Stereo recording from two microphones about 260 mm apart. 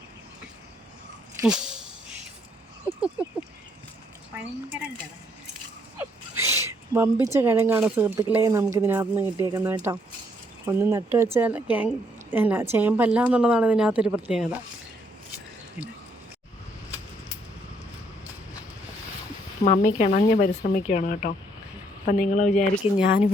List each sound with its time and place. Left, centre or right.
1.4 s a sound: centre
3.2 s a woman's voice: centre
6.0 s a woman's voice: centre
19.6 s speech: left
22.8 s a woman's voice: centre